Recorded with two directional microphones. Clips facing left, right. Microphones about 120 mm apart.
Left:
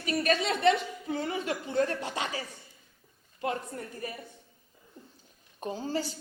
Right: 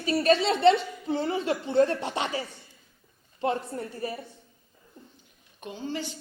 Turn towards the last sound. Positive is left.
turn(degrees=40)  # may be behind; listen again after turning